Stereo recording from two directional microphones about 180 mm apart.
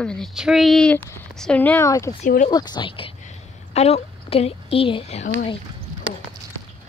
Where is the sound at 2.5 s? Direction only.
25° left (ahead or behind).